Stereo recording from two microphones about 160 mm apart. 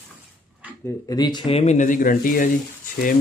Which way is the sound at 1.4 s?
40° left (ahead or behind).